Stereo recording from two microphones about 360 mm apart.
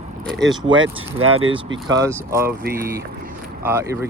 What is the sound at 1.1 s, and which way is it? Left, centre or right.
Speech, centre.